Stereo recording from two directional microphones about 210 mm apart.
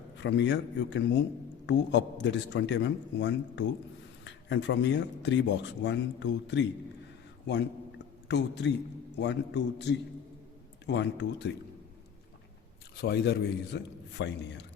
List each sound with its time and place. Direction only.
0.2 s speech: 55° left (ahead or behind)
7.4 s a sound: 55° left (ahead or behind)
9.1 s speech: 55° left (ahead or behind)
10.8 s speech: 55° left (ahead or behind)
13.0 s a man's voice: 50° left (ahead or behind)